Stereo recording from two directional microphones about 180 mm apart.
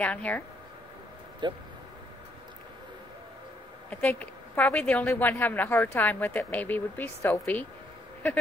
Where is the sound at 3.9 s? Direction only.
10° left (ahead or behind).